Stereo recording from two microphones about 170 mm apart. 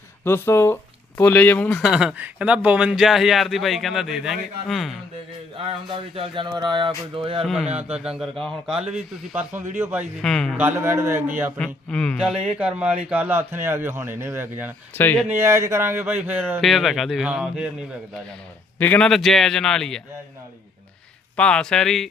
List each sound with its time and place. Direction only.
0.3 s speech: 15° left (ahead or behind)
1.8 s speech: 5° right (ahead or behind)
5.5 s speech: 30° right (ahead or behind)
7.4 s speech: 5° right (ahead or behind)
8.9 s speech: 10° right (ahead or behind)
10.2 s speech: 5° left (ahead or behind)
10.6 s speech: 15° right (ahead or behind)
11.5 s speech: 5° left (ahead or behind)
12.5 s speech: 10° right (ahead or behind)
14.9 s speech: 10° left (ahead or behind)
15.3 s speech: 15° right (ahead or behind)
16.6 s speech: centre (ahead or behind)
18.8 s speech: 10° left (ahead or behind)
21.3 s speech: 5° left (ahead or behind)